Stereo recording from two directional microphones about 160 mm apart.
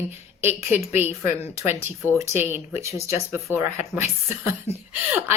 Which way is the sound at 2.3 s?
15° right (ahead or behind).